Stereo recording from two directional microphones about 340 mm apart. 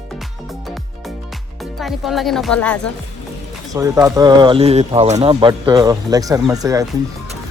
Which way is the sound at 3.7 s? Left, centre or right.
Centre.